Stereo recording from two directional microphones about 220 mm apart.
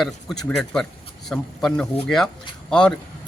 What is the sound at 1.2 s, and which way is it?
Speech, centre (ahead or behind).